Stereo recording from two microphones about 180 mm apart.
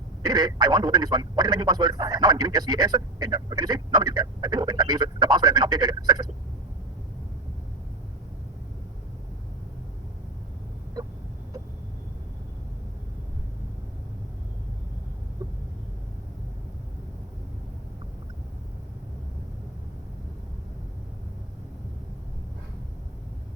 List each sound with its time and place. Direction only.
0.3 s a man's voice: 20° right (ahead or behind)